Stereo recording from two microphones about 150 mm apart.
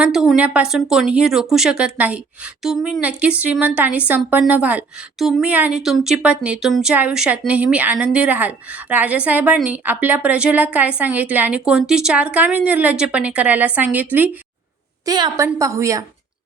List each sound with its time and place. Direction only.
0.0 s a woman's voice: 5° right (ahead or behind)
15.0 s a woman's voice: 25° right (ahead or behind)